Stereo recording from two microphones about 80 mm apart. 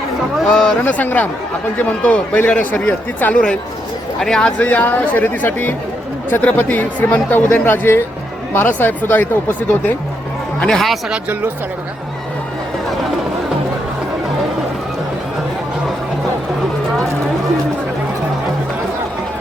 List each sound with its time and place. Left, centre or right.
0.3 s a man's voice: centre
0.8 s speech: left
4.6 s speech: left
10.6 s a man's voice: centre